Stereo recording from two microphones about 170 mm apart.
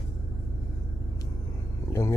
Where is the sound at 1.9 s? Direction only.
15° left (ahead or behind).